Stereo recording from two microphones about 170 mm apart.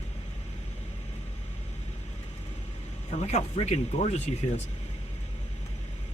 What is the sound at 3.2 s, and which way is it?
Speech, 40° left (ahead or behind).